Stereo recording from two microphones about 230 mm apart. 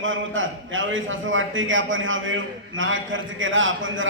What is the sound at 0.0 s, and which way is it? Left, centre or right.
A man's voice, right.